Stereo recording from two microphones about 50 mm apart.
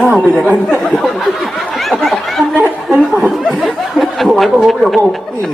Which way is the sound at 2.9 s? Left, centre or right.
Centre.